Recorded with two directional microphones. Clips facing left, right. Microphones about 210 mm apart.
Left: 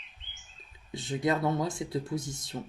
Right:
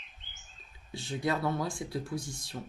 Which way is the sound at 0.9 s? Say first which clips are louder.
Left 3 dB; 20° left (ahead or behind).